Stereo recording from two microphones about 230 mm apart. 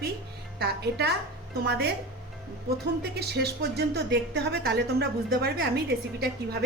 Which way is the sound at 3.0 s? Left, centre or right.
Right.